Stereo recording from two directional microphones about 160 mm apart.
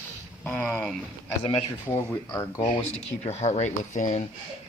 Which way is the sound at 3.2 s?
40° left (ahead or behind).